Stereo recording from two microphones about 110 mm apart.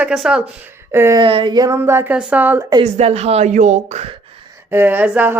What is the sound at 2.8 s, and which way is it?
A woman's voice, 75° right (ahead or behind).